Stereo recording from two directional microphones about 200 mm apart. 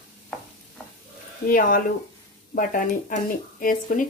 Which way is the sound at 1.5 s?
45° left (ahead or behind).